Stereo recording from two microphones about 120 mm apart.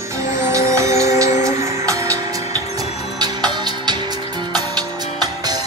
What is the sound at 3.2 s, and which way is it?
Music, 35° right (ahead or behind).